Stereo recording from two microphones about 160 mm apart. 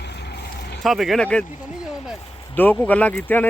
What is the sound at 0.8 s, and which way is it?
Speech, centre (ahead or behind).